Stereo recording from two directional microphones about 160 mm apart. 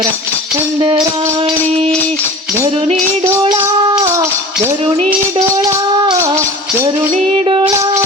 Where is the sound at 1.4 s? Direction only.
35° right (ahead or behind).